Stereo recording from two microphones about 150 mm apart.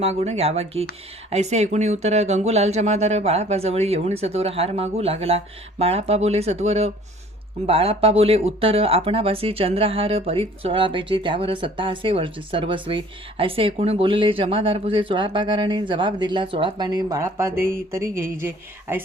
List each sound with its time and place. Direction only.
0.0 s speech: 45° right (ahead or behind); by 19.0 s 15° right (ahead or behind)